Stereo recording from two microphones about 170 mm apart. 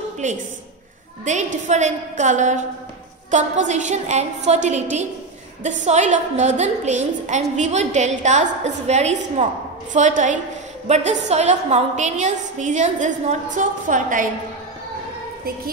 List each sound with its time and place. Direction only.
0.2 s a woman's voice: 45° right (ahead or behind)